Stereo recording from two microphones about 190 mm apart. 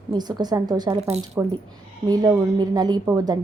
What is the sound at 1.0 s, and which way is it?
Speech, 35° right (ahead or behind).